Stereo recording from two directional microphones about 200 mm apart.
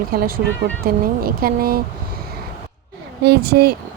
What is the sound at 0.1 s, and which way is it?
A woman's voice, 50° right (ahead or behind).